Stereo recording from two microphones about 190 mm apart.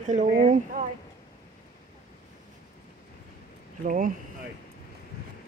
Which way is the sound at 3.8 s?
45° right (ahead or behind).